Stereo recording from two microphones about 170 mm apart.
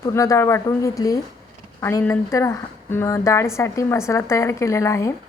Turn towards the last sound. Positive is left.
turn(degrees=15)  # may be behind; listen again after turning